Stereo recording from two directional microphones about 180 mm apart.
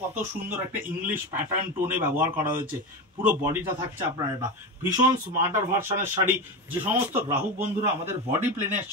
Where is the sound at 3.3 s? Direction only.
10° right (ahead or behind).